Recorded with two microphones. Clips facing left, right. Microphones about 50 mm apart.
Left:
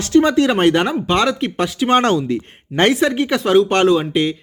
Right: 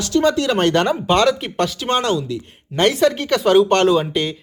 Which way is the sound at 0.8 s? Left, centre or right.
Centre.